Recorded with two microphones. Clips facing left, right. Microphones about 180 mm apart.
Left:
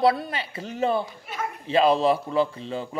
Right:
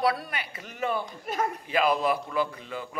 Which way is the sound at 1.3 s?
50° right (ahead or behind).